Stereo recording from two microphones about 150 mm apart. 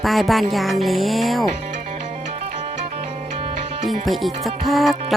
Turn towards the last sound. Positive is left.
turn(degrees=0)  # may be behind; listen again after turning